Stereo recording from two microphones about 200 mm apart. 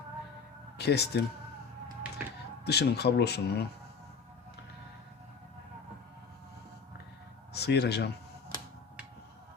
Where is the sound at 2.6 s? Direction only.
55° left (ahead or behind).